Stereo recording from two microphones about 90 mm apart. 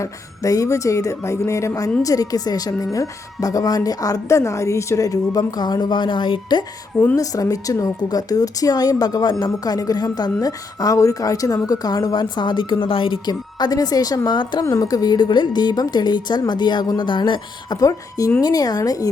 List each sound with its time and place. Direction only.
0.0 s a woman's voice: 40° left (ahead or behind); by 6.6 s 70° left (ahead or behind)
6.9 s speech: 20° left (ahead or behind)
7.2 s a woman's voice: 40° left (ahead or behind)
14.6 s a woman's voice: 40° left (ahead or behind); by 17.7 s 60° left (ahead or behind)
17.7 s a woman's voice: 40° left (ahead or behind)